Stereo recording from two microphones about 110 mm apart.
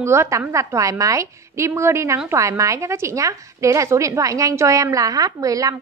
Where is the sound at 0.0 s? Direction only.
25° right (ahead or behind).